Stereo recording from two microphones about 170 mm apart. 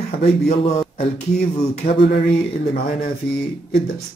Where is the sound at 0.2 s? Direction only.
40° left (ahead or behind).